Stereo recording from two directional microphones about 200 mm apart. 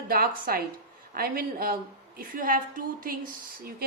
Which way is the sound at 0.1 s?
50° right (ahead or behind).